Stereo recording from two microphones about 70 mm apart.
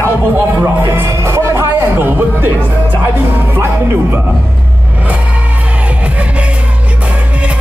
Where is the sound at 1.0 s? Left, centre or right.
Right.